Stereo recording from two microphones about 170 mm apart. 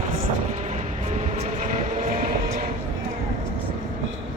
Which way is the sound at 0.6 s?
45° right (ahead or behind).